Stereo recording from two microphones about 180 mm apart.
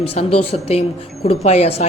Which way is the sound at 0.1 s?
35° left (ahead or behind).